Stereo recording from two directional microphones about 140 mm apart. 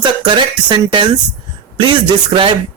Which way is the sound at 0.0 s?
35° right (ahead or behind).